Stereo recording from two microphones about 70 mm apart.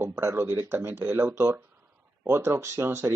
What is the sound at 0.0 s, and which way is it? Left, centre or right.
Speech, right.